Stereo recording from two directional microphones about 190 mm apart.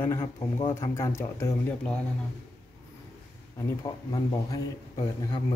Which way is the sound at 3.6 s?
20° left (ahead or behind).